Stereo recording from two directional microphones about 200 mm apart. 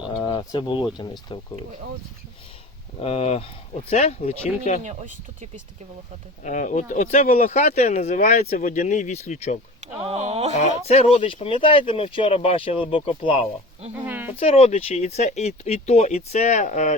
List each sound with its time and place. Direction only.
0.1 s a sound: 20° left (ahead or behind)
1.0 s speech: 20° left (ahead or behind)
3.0 s speech: 30° left (ahead or behind)
4.8 s speech: 35° right (ahead or behind)
6.4 s speech: 40° left (ahead or behind)
9.8 s speech: 30° right (ahead or behind)
10.5 s speech: 30° left (ahead or behind)
13.9 s speech: 10° right (ahead or behind)
14.3 s speech: 30° left (ahead or behind)